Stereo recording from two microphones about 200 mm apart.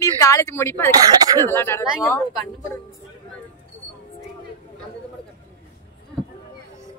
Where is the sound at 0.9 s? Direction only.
20° right (ahead or behind).